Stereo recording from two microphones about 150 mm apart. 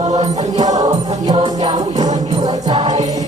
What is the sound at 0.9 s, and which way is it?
Music, 35° right (ahead or behind).